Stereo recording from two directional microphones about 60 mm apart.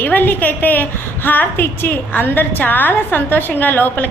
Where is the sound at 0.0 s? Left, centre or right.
Left.